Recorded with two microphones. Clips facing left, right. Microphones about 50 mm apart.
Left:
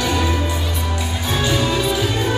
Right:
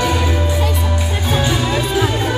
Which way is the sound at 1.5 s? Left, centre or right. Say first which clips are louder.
Right 1 dB; centre.